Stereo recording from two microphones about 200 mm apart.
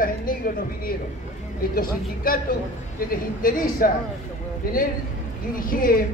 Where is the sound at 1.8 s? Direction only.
45° left (ahead or behind).